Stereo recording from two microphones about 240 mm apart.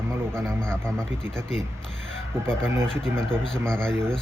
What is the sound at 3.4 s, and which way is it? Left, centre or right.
Speech, centre.